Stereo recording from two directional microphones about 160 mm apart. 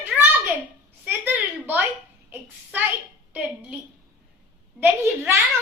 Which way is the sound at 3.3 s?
10° right (ahead or behind).